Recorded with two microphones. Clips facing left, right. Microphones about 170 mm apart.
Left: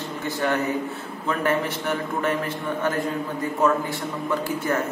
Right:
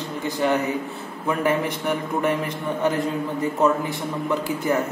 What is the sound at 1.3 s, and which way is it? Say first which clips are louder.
A man's voice: right 2 dB; 10° right (ahead or behind).